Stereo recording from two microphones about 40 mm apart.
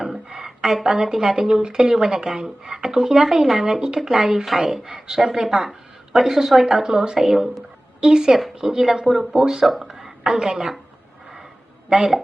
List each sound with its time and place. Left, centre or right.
0.0 s speech: centre
9.8 s a sound: centre
10.2 s speech: centre
11.9 s a woman's voice: centre